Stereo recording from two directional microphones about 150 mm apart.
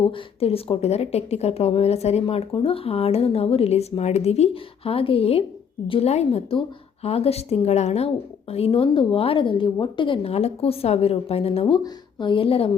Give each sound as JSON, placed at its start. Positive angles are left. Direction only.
{"t": 0.0, "sound": "speech", "side_deg": 40}